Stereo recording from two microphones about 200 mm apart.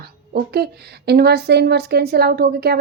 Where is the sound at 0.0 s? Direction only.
50° right (ahead or behind).